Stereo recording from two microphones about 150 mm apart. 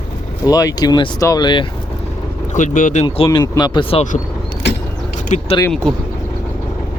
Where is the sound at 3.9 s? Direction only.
50° left (ahead or behind).